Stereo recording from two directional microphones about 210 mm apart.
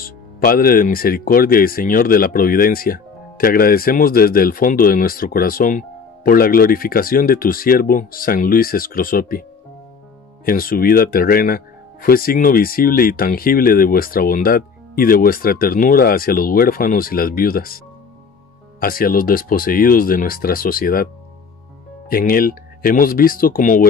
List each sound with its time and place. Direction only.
0.0 s speech: 45° left (ahead or behind)
10.4 s speech: 45° left (ahead or behind)
22.1 s speech: 45° left (ahead or behind)